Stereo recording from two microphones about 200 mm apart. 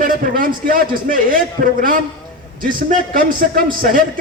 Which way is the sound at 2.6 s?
45° right (ahead or behind).